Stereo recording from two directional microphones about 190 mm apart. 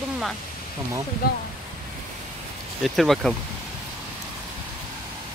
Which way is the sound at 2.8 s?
Centre (ahead or behind).